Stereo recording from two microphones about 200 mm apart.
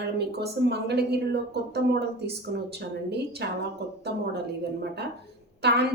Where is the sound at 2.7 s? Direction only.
55° right (ahead or behind).